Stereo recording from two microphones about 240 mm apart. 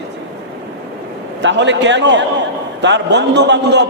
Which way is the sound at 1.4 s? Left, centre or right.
Right.